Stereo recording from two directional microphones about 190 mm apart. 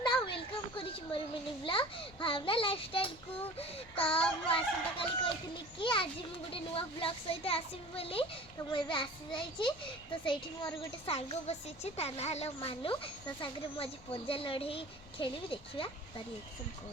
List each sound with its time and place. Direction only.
0.0 s a sound: 25° left (ahead or behind)
1.6 s a woman's voice: 25° left (ahead or behind)
10.2 s a woman's voice: 25° left (ahead or behind)